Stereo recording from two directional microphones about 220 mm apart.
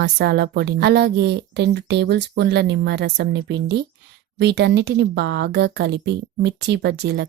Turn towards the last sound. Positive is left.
turn(degrees=-50)  # may be behind; listen again after turning